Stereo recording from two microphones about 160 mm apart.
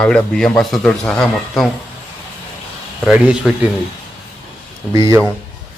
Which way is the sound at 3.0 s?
5° right (ahead or behind).